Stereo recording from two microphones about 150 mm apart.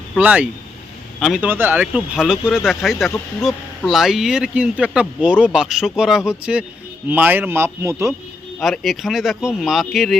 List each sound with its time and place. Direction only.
0.2 s speech: 10° right (ahead or behind)
8.5 s speech: 5° left (ahead or behind)